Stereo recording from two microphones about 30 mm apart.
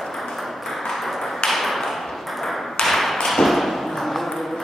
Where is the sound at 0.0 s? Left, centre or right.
Centre.